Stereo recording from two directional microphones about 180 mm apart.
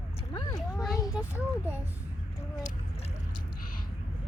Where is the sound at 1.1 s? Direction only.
10° right (ahead or behind).